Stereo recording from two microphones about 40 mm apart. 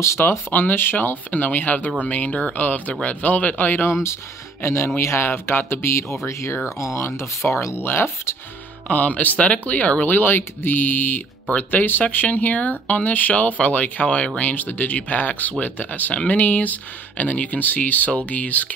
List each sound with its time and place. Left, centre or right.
0.5 s speech: left
0.9 s speech: left
2.5 s speech: left
4.6 s speech: left
7.4 s speech: left
7.8 s speech: left
8.8 s speech: left
10.1 s speech: left
14.4 s speech: left